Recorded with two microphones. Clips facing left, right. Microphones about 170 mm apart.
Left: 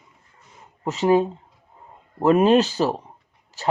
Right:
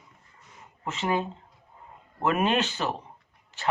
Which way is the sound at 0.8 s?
35° left (ahead or behind).